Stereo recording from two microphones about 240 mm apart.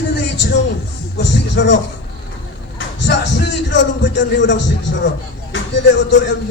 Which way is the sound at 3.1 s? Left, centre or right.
Left.